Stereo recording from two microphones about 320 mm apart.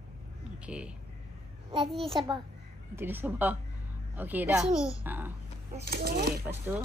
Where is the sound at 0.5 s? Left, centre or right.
Centre.